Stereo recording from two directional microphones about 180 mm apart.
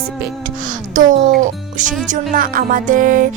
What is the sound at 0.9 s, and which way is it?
Speech, 45° right (ahead or behind).